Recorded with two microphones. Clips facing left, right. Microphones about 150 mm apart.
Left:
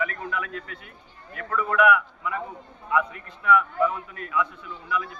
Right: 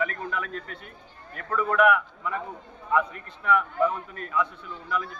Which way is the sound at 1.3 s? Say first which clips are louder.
Even; 40° right (ahead or behind).